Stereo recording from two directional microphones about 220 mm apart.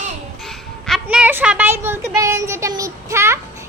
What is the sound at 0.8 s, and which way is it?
Child singing, centre (ahead or behind).